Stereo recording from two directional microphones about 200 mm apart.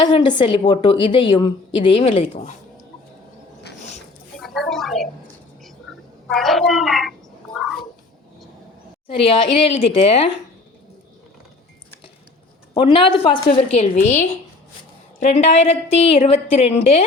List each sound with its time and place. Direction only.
0.0 s a woman's voice: 25° left (ahead or behind)
4.4 s a sound: centre (ahead or behind)
6.3 s a child's voice: centre (ahead or behind)
9.1 s a woman's voice: 30° left (ahead or behind)
12.7 s a woman's voice: 25° left (ahead or behind)